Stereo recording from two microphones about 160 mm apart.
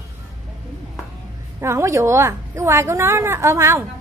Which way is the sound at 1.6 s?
15° right (ahead or behind).